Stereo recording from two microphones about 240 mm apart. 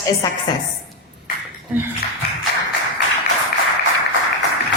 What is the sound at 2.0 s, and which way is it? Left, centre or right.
Speech, left.